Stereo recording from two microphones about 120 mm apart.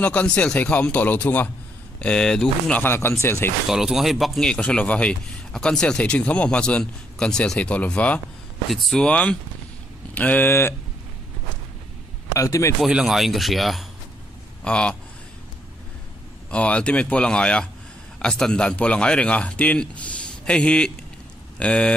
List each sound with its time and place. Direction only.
0.0 s a man's voice: 10° left (ahead or behind)
2.8 s speech: 20° left (ahead or behind)
3.6 s a man's voice: 5° right (ahead or behind)
8.6 s a man's voice: centre (ahead or behind); by 10.7 s 20° left (ahead or behind)
12.4 s speech: 25° left (ahead or behind)
12.8 s speech: 5° right (ahead or behind)
16.4 s a man's voice: 10° left (ahead or behind)